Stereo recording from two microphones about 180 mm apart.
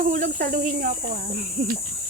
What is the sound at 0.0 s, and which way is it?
A child's voice, 45° right (ahead or behind).